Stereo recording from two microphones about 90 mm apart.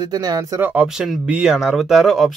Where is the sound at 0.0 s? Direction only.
50° right (ahead or behind).